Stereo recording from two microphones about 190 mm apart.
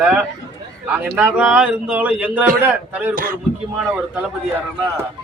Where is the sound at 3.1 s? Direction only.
50° right (ahead or behind).